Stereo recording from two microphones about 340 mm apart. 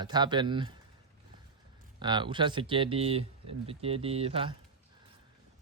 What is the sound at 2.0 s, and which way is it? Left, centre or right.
Speech, centre.